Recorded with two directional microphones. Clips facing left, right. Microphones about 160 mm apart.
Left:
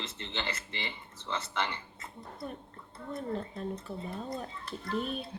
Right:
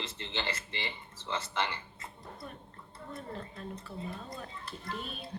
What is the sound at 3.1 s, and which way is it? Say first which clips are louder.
Speech: left 7 dB; 30° left (ahead or behind).